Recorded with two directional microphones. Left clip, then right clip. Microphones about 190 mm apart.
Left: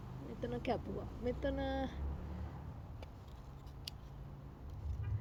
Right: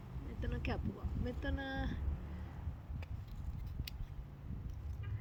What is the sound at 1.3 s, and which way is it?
Speech, 25° right (ahead or behind).